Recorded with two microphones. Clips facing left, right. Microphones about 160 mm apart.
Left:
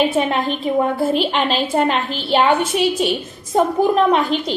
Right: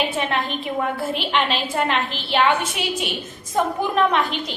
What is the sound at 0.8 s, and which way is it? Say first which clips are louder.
A woman's voice: left 7 dB; 40° left (ahead or behind).